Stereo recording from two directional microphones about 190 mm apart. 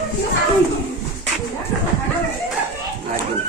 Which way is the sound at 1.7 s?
Centre (ahead or behind).